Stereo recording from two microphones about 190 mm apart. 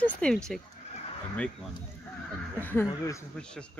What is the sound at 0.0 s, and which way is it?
Speech, 5° left (ahead or behind).